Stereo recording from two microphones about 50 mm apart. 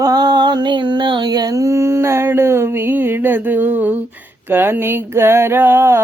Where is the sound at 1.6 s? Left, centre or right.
Right.